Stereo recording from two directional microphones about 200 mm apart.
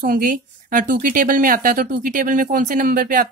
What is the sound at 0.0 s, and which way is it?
Speech, 40° right (ahead or behind).